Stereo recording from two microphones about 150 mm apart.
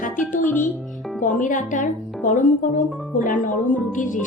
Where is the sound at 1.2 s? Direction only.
60° left (ahead or behind).